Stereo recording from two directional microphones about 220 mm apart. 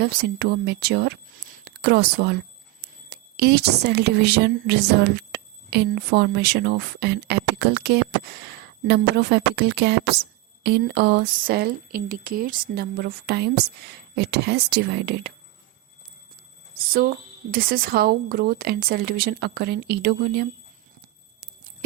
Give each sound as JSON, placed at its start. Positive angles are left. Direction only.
{"t": 0.0, "sound": "a woman's voice", "side_deg": -50}
{"t": 16.7, "sound": "speech", "side_deg": -40}